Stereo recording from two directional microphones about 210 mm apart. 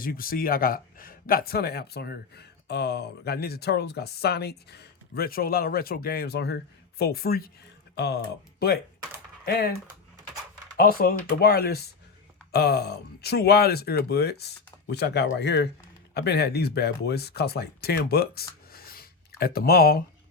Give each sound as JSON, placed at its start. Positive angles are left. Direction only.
{"t": 0.0, "sound": "speech", "side_deg": 45}
{"t": 10.8, "sound": "speech", "side_deg": 45}